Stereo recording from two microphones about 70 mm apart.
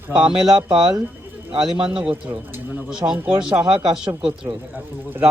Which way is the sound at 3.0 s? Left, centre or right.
Right.